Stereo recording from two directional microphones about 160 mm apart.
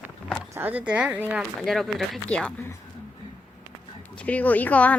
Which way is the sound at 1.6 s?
Centre (ahead or behind).